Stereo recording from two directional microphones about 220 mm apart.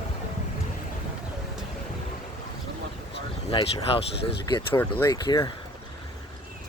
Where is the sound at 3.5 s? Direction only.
20° left (ahead or behind).